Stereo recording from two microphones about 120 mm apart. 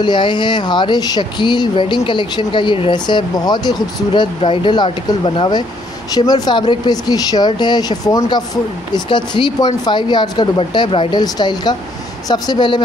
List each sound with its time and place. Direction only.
0.0 s speech: 40° left (ahead or behind)
6.1 s speech: 35° left (ahead or behind)